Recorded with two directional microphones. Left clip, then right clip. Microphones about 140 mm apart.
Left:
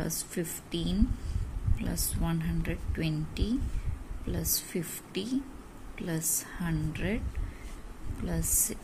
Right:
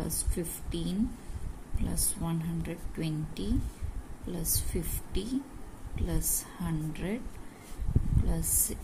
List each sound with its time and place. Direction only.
0.0 s speech: 15° left (ahead or behind)
8.3 s speech: 15° left (ahead or behind)